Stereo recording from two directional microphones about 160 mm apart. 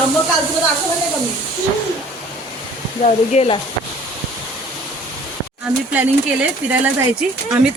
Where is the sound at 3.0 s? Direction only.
45° left (ahead or behind).